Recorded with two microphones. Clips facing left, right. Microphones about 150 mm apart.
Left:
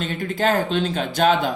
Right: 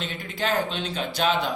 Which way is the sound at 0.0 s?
45° left (ahead or behind).